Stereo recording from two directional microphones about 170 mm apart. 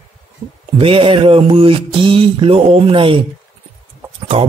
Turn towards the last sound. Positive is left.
turn(degrees=-35)  # may be behind; listen again after turning